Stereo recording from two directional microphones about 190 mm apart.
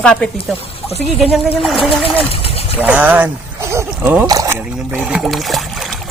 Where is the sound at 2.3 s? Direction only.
30° left (ahead or behind).